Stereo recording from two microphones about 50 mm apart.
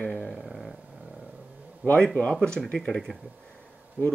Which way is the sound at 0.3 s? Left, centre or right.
Centre.